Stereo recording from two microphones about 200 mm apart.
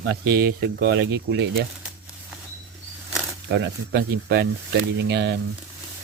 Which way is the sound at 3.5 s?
55° right (ahead or behind).